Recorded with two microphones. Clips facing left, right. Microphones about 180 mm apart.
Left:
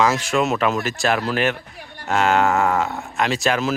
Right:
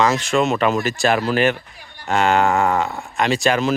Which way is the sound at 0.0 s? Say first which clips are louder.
Right 1 dB; 5° left (ahead or behind).